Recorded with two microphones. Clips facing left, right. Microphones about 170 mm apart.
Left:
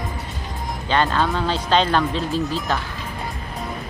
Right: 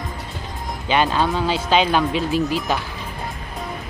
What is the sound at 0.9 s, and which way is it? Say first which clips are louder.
Speech: right 1 dB; 15° right (ahead or behind).